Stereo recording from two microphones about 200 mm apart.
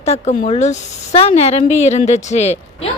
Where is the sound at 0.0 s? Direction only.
30° left (ahead or behind).